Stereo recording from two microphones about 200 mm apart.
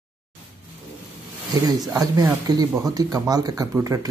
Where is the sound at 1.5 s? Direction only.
20° right (ahead or behind).